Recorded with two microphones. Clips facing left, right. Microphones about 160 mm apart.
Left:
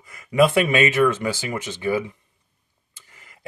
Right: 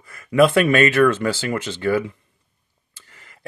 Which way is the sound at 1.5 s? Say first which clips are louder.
Right 4 dB; 70° right (ahead or behind).